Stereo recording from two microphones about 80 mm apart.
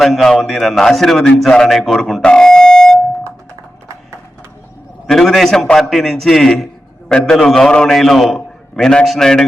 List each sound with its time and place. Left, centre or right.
0.0 s a man's voice: centre
5.0 s a man's voice: centre